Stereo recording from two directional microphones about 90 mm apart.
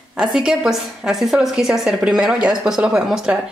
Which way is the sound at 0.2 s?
10° right (ahead or behind).